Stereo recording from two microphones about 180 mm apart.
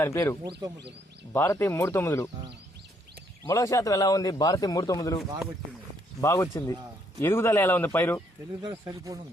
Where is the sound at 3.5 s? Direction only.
20° left (ahead or behind).